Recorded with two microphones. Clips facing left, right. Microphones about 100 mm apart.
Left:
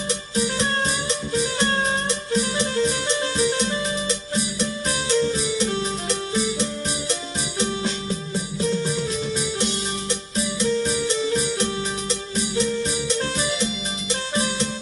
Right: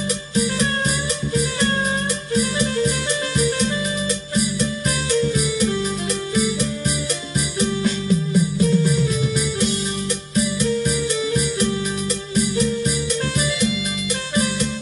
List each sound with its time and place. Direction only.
1.3 s music: 25° left (ahead or behind)
5.2 s music: 25° left (ahead or behind)
10.3 s music: 25° left (ahead or behind)